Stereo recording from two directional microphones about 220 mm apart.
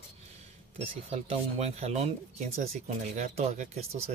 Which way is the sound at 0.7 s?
30° right (ahead or behind).